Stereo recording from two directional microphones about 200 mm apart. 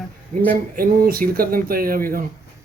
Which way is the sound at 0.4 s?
45° right (ahead or behind).